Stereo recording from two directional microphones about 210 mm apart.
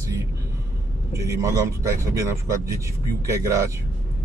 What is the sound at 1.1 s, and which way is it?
Speech, 15° right (ahead or behind).